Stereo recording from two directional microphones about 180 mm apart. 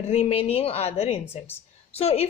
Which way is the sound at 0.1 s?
35° left (ahead or behind).